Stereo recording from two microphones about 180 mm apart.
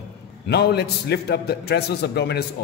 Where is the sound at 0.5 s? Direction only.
65° left (ahead or behind).